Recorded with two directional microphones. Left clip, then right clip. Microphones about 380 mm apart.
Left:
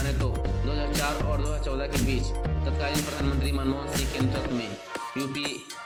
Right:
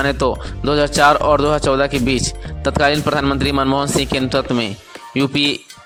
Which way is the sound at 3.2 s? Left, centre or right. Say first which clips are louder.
Right 13 dB; right.